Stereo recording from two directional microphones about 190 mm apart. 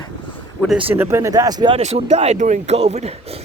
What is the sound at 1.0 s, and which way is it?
Speech, 15° right (ahead or behind).